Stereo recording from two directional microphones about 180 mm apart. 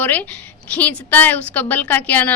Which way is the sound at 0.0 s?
10° left (ahead or behind).